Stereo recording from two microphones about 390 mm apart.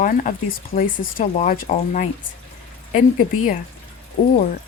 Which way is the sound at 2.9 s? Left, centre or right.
Centre.